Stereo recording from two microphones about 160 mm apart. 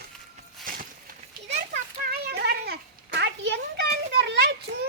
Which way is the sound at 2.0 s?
90° right.